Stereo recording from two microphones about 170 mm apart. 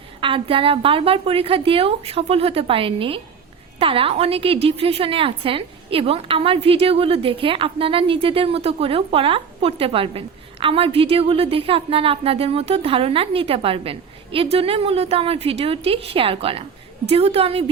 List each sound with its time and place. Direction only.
0.2 s a woman's voice: 30° right (ahead or behind)